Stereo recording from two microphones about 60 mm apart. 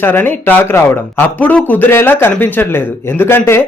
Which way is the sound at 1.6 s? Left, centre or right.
Left.